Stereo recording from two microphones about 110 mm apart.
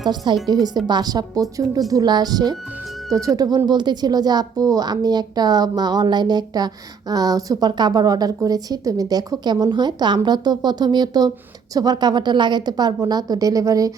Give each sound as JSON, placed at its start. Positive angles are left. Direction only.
{"t": 0.3, "sound": "a woman's voice", "side_deg": -45}